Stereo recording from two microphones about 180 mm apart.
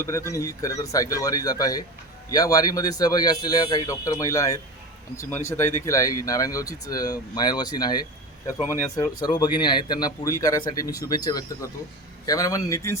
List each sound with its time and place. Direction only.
0.0 s speech: 15° left (ahead or behind)